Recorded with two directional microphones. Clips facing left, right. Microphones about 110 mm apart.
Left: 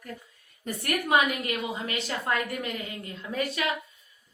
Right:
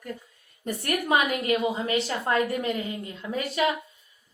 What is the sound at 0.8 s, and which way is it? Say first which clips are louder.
Speech: even; 30° right (ahead or behind).